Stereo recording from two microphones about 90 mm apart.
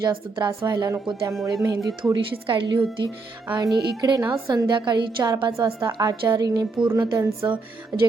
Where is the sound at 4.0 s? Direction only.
40° right (ahead or behind).